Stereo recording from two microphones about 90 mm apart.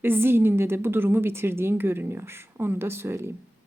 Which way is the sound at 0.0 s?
25° right (ahead or behind).